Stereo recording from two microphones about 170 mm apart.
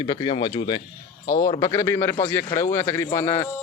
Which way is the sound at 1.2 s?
55° left (ahead or behind).